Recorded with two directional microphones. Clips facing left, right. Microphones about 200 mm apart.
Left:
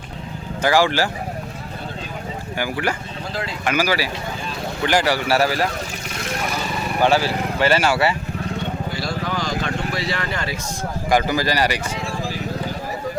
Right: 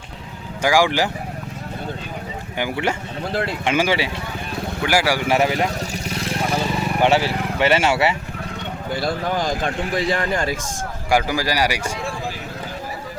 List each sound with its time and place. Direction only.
0.6 s a man's voice: 15° right (ahead or behind)
2.6 s speech: 20° right (ahead or behind)
4.8 s a man's voice: 10° right (ahead or behind)
7.0 s speech: 25° right (ahead or behind)
8.9 s a sound: 55° right (ahead or behind)
11.1 s a man's voice: 10° right (ahead or behind)